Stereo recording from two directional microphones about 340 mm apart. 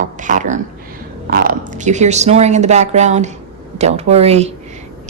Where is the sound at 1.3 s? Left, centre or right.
Right.